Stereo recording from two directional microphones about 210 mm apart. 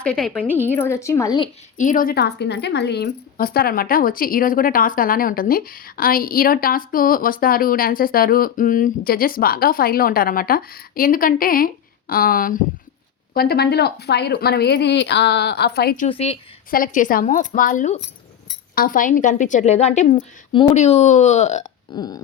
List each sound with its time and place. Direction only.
0.0 s a woman's voice: 5° left (ahead or behind)
1.8 s speech: 40° left (ahead or behind)
16.0 s a woman's voice: 30° left (ahead or behind)
16.7 s speech: 40° left (ahead or behind)
21.9 s a woman's voice: 20° left (ahead or behind)